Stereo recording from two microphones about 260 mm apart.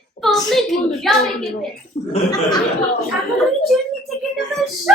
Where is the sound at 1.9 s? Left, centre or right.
Left.